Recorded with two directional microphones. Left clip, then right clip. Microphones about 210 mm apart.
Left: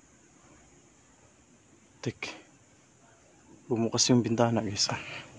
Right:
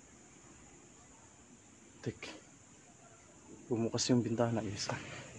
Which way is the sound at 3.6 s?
35° left (ahead or behind).